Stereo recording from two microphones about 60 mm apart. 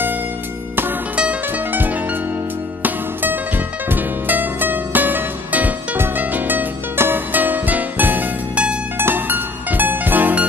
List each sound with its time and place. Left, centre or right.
1.5 s music: right